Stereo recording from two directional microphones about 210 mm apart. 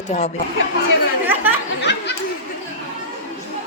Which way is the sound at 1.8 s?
55° left (ahead or behind).